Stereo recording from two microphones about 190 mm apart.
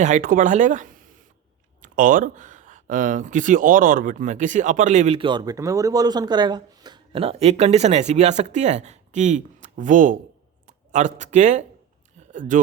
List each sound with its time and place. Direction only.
0.0 s speech: 45° right (ahead or behind)